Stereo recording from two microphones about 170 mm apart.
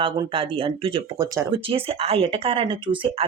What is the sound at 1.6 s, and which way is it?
Speech, 35° right (ahead or behind).